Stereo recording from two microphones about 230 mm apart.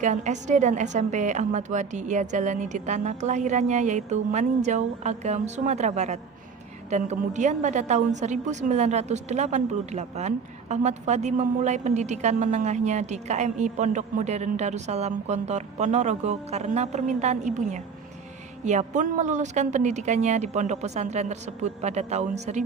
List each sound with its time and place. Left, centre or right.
0.0 s a woman's voice: right